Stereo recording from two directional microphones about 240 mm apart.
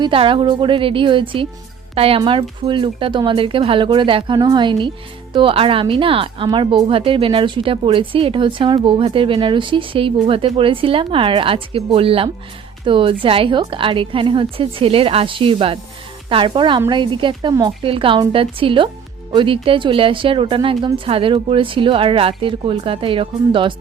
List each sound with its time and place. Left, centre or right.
0.0 s speech: right